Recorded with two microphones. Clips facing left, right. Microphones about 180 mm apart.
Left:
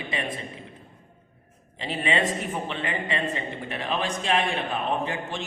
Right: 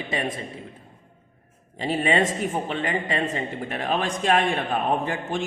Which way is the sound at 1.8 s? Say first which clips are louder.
Right 4 dB; 45° right (ahead or behind).